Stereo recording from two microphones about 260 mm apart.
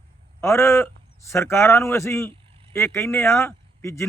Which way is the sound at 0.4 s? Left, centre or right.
Centre.